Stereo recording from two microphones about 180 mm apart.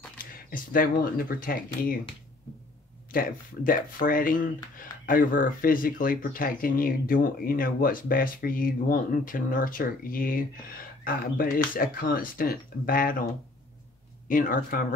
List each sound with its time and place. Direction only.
0.2 s speech: 50° left (ahead or behind)
3.1 s speech: 50° left (ahead or behind)
14.2 s speech: 50° left (ahead or behind)